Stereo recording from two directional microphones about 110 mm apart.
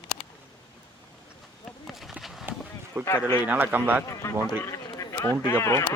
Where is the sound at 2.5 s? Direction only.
20° right (ahead or behind).